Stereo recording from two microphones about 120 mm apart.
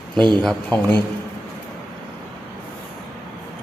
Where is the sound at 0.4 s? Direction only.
10° left (ahead or behind).